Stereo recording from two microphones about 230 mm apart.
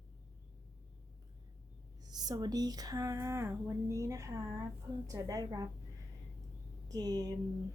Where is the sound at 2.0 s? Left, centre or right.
Centre.